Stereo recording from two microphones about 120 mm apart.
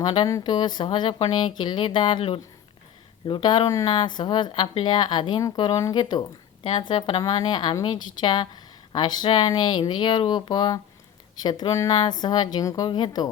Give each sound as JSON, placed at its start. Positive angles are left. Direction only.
{"t": 0.0, "sound": "speech", "side_deg": 40}
{"t": 0.3, "sound": "a woman's voice", "side_deg": 30}